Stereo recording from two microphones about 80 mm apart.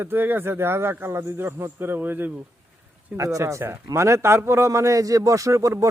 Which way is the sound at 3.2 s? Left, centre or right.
Right.